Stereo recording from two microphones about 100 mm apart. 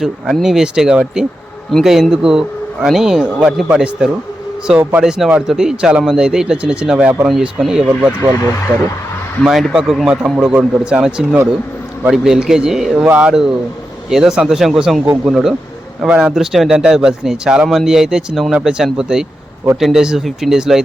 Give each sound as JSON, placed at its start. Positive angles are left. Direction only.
{"t": 0.0, "sound": "speech", "side_deg": 0}
{"t": 13.1, "sound": "speech", "side_deg": -15}
{"t": 14.1, "sound": "speech", "side_deg": -5}